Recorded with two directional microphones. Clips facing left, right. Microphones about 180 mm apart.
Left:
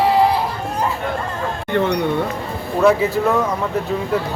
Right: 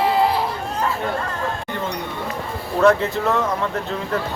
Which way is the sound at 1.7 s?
65° left (ahead or behind).